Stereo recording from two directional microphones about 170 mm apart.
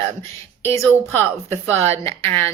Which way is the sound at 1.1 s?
15° left (ahead or behind).